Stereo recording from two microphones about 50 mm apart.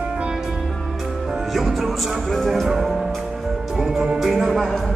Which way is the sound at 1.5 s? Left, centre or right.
Centre.